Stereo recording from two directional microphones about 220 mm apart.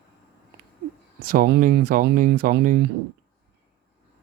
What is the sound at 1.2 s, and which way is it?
Speech, 40° right (ahead or behind).